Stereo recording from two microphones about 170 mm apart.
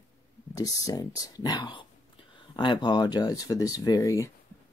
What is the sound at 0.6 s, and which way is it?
Speech, 20° left (ahead or behind).